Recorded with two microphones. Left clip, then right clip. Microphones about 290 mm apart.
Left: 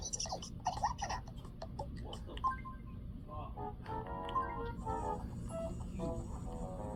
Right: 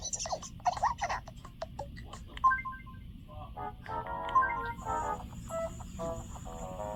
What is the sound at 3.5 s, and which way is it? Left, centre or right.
Music, right.